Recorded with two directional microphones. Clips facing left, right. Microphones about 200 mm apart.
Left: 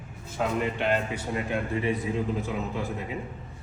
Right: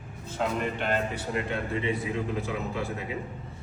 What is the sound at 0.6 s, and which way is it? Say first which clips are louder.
Speech: left 2 dB; 45° right (ahead or behind).